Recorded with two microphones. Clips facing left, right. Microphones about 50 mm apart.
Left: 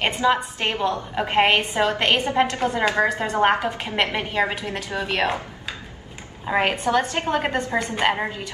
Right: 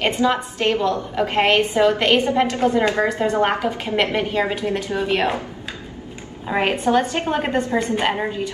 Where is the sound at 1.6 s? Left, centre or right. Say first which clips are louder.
Right 4 dB; left.